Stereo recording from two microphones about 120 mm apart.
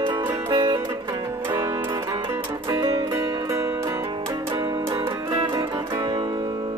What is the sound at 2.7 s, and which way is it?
Music, 35° right (ahead or behind).